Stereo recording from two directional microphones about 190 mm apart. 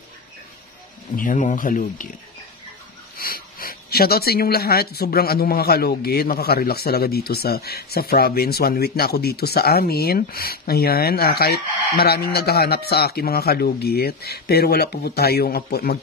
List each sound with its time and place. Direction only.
1.1 s speech: 45° left (ahead or behind)
3.2 s speech: 50° left (ahead or behind)